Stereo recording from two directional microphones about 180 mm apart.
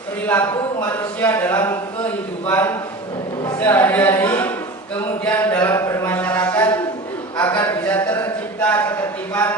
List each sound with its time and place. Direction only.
0.3 s speech: 10° left (ahead or behind)
3.4 s speech: 10° left (ahead or behind)
5.2 s a sound: 10° left (ahead or behind)